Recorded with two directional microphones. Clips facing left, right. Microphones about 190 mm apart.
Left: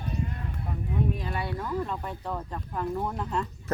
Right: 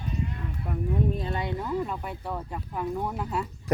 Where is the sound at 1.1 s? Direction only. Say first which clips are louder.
Right 2 dB; 25° right (ahead or behind).